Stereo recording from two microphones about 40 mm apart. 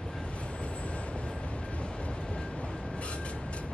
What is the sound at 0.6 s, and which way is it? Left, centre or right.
Vehicle, left.